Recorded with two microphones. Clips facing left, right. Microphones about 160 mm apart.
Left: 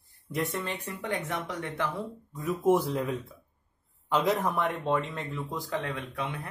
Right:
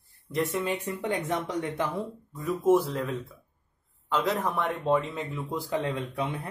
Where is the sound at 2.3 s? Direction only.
Centre (ahead or behind).